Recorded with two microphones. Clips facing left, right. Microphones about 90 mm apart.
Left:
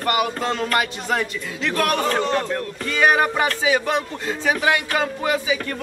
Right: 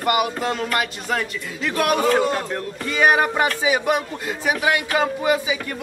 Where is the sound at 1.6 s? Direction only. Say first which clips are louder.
Right 1 dB; 10° right (ahead or behind).